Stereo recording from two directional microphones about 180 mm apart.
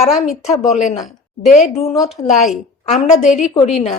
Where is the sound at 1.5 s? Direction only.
40° left (ahead or behind).